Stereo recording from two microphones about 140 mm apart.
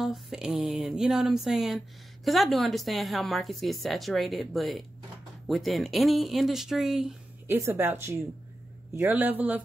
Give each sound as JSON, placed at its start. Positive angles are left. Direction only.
{"t": 0.0, "sound": "a woman's voice", "side_deg": -5}
{"t": 7.4, "sound": "speech", "side_deg": -20}